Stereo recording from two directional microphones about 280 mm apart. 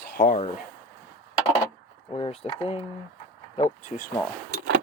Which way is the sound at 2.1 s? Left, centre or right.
Centre.